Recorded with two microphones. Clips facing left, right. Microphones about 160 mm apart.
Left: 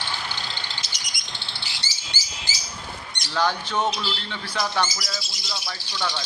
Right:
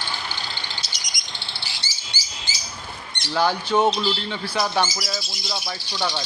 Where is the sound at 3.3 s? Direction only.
10° right (ahead or behind).